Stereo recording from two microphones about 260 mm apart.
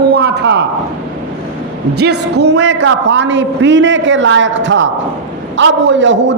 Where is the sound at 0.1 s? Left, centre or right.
Right.